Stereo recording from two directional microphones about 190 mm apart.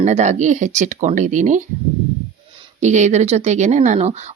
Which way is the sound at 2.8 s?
40° right (ahead or behind).